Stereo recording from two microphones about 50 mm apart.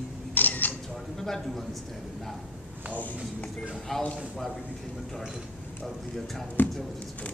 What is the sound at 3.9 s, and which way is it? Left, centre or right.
Speech, centre.